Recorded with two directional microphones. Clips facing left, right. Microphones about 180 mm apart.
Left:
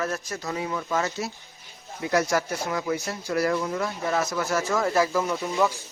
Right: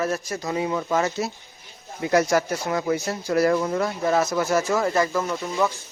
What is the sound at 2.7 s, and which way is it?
Speech, 40° right (ahead or behind).